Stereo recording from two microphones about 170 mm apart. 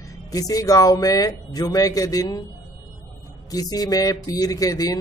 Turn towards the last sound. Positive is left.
turn(degrees=20)  # may be behind; listen again after turning